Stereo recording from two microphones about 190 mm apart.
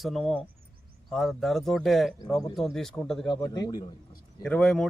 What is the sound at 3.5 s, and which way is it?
Speech, 20° left (ahead or behind).